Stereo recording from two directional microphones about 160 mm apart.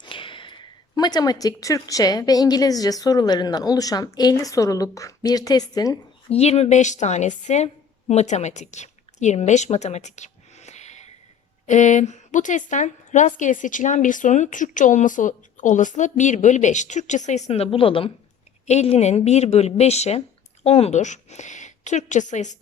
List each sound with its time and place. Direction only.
0.0 s a sound: 30° left (ahead or behind)
0.9 s a woman's voice: 25° left (ahead or behind)
6.2 s a woman's voice: 40° left (ahead or behind)